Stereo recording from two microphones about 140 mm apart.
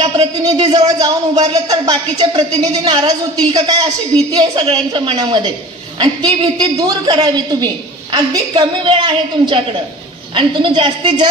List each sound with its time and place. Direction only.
0.0 s a woman's voice: 35° right (ahead or behind)